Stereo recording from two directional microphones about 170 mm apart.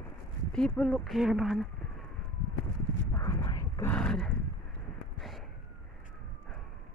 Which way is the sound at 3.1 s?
15° left (ahead or behind).